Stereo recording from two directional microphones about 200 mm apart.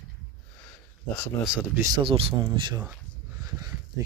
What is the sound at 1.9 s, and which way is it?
Speech, 25° right (ahead or behind).